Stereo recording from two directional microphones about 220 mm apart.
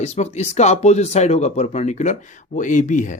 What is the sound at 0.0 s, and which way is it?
Speech, 30° left (ahead or behind).